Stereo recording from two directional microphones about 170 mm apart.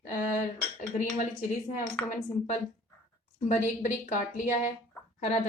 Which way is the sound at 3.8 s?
45° left (ahead or behind).